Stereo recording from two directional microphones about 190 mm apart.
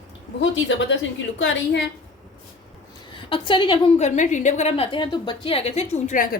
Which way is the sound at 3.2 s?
25° left (ahead or behind).